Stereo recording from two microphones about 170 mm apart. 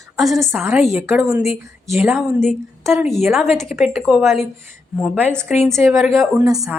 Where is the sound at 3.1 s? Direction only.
Centre (ahead or behind).